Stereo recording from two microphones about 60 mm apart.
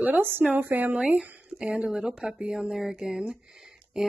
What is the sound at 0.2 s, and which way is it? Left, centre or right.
Speech, right.